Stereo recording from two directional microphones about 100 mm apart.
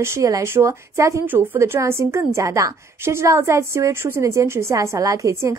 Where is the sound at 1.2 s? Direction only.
20° right (ahead or behind).